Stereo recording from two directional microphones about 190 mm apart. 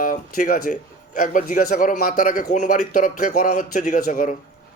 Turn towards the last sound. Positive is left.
turn(degrees=45)  # may be behind; listen again after turning